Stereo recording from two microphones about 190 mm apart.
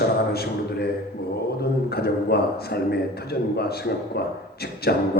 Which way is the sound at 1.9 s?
55° left (ahead or behind).